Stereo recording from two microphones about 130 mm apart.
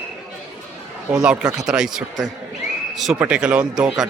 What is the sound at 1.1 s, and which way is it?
Speech, 5° right (ahead or behind).